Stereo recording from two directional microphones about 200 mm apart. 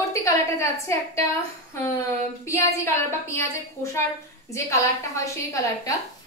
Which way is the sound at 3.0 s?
15° left (ahead or behind).